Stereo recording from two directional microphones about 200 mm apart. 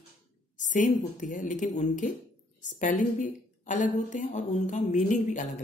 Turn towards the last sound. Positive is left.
turn(degrees=40)  # may be behind; listen again after turning